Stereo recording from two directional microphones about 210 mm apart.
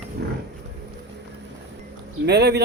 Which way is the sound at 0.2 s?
50° right (ahead or behind).